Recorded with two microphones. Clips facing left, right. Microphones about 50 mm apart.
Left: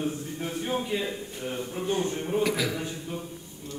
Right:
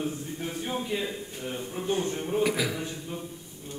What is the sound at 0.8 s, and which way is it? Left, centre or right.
Speech, centre.